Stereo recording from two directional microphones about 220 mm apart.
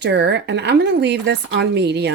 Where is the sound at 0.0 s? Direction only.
50° right (ahead or behind).